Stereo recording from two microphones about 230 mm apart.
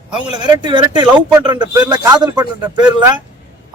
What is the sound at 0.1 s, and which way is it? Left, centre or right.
A man's voice, centre.